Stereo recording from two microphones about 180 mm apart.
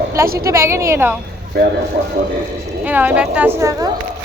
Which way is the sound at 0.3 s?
15° right (ahead or behind).